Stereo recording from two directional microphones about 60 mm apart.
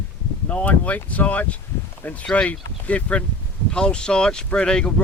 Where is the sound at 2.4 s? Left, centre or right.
Left.